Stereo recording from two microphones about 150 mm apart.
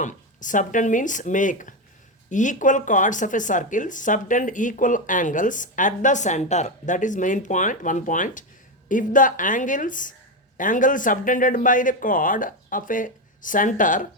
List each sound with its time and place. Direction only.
0.0 s speech: 60° left (ahead or behind)